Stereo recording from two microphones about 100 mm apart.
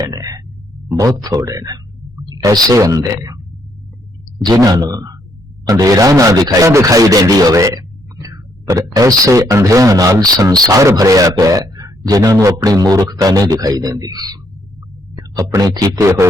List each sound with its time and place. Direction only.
0.0 s a sound: 35° right (ahead or behind)
0.9 s speech: 35° right (ahead or behind)
4.4 s speech: 40° right (ahead or behind)